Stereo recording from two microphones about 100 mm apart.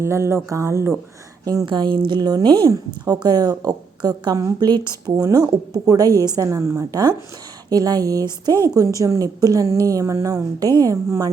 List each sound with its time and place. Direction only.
0.0 s speech: 25° right (ahead or behind)
1.6 s a woman's voice: 55° right (ahead or behind); by 11.3 s 35° right (ahead or behind)